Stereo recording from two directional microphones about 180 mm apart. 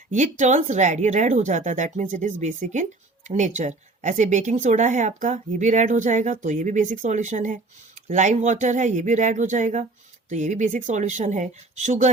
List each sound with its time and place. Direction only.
0.1 s speech: 40° right (ahead or behind)